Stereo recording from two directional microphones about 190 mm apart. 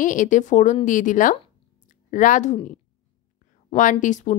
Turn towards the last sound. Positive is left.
turn(degrees=40)  # may be behind; listen again after turning